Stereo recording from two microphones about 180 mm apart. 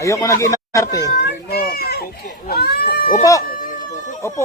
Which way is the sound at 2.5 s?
60° left (ahead or behind).